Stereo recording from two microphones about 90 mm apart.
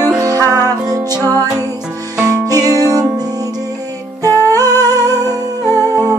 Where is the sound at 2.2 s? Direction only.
45° right (ahead or behind).